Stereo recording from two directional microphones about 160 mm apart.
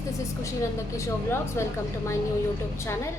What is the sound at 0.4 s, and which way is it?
A woman's voice, 20° left (ahead or behind).